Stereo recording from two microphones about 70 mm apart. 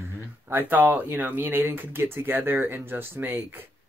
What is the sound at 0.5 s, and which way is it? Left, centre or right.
Speech, right.